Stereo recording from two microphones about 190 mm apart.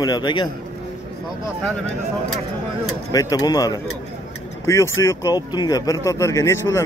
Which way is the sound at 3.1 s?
20° left (ahead or behind).